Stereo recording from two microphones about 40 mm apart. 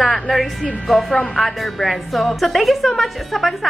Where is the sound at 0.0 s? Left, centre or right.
Centre.